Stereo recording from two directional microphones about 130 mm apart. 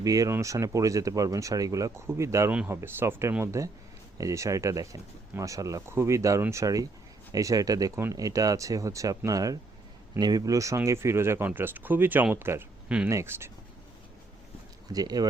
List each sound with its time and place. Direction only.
0.0 s speech: 25° right (ahead or behind)
14.8 s speech: 30° right (ahead or behind)